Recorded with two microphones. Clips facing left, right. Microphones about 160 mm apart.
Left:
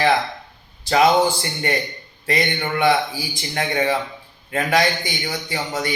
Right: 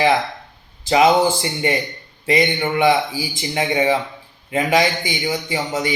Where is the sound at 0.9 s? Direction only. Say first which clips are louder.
Right 2 dB; 15° right (ahead or behind).